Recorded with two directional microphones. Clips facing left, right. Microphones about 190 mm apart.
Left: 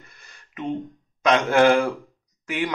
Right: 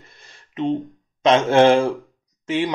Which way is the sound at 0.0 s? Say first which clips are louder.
Right 2 dB; 25° right (ahead or behind).